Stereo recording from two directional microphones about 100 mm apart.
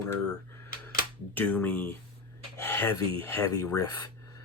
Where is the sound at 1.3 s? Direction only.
15° left (ahead or behind).